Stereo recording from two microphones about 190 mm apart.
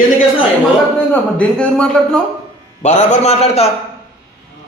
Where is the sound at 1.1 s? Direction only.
5° left (ahead or behind).